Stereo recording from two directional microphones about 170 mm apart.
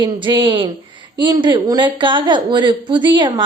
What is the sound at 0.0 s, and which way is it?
A woman's voice, 30° right (ahead or behind).